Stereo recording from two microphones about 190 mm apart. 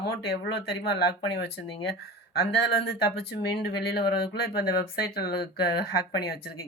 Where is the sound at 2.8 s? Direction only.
55° left (ahead or behind).